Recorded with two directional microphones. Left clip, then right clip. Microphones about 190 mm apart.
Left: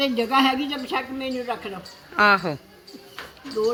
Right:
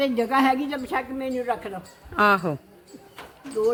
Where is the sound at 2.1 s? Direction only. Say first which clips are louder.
Left 2 dB; 25° right (ahead or behind).